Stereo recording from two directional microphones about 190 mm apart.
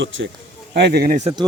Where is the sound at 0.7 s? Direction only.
60° right (ahead or behind).